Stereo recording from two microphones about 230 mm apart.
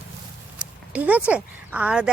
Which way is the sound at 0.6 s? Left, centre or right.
Centre.